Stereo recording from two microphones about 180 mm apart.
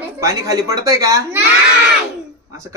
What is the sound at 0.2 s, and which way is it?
Speech, 15° right (ahead or behind).